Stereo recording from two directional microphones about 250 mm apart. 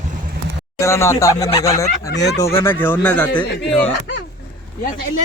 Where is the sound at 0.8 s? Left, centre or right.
Centre.